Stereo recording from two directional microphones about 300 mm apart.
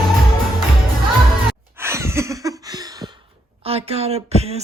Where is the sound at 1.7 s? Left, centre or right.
Centre.